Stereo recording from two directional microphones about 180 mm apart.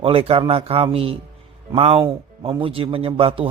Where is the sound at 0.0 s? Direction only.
30° right (ahead or behind).